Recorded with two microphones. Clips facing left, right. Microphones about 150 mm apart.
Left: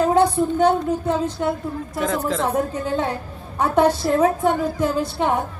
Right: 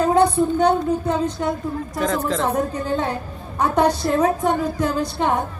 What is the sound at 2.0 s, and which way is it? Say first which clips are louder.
Speech: even; 10° left (ahead or behind).